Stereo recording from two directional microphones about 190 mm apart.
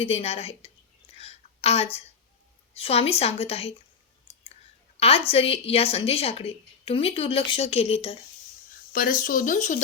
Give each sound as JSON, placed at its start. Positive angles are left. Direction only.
{"t": 0.0, "sound": "a woman's voice", "side_deg": 30}
{"t": 1.1, "sound": "a sound", "side_deg": 35}
{"t": 2.7, "sound": "a woman's voice", "side_deg": 30}
{"t": 4.9, "sound": "a woman's voice", "side_deg": 30}
{"t": 8.9, "sound": "speech", "side_deg": 45}